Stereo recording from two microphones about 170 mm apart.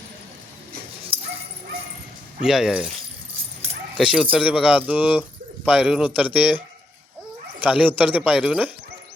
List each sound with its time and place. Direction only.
1.1 s dog: 35° right (ahead or behind)
2.4 s speech: 5° right (ahead or behind)
3.9 s speech: 5° right (ahead or behind)
7.6 s speech: 10° right (ahead or behind)